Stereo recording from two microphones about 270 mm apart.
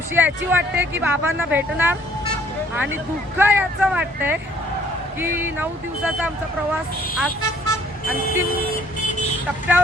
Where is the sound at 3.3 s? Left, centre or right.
Centre.